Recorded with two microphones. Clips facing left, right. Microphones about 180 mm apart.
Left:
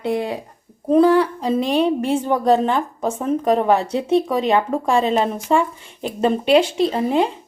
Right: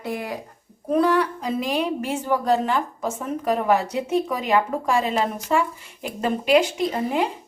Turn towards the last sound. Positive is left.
turn(degrees=25)  # may be behind; listen again after turning